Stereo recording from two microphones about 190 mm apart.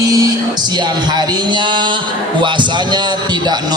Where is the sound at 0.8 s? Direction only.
20° right (ahead or behind).